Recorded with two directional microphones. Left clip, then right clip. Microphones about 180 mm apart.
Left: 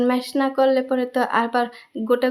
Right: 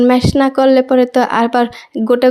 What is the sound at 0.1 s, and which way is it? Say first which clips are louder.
Speech: right 9 dB; 35° right (ahead or behind).